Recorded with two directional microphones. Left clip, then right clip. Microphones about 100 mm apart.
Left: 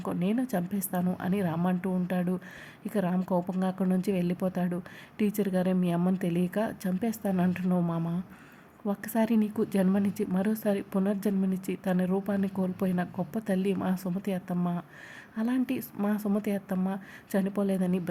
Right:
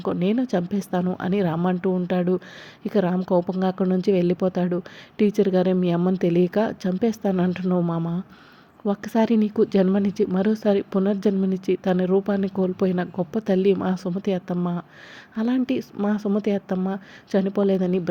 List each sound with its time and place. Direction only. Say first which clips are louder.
0.1 s a woman's voice: right 8 dB; 40° right (ahead or behind)
8.8 s speech: right 7 dB; 30° right (ahead or behind)
13.9 s a woman's voice: right 6 dB; 20° right (ahead or behind)
14.3 s a woman's voice: right 8 dB; 30° right (ahead or behind)